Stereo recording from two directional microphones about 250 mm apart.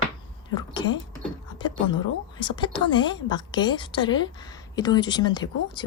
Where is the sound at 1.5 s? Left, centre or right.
Centre.